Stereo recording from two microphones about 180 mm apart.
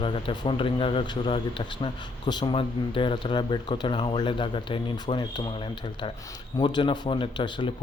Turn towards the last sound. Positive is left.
turn(degrees=25)  # may be behind; listen again after turning